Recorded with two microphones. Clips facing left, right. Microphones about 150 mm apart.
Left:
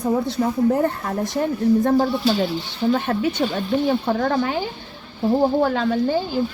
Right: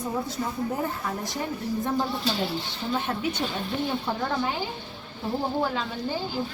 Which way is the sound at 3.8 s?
75° left (ahead or behind).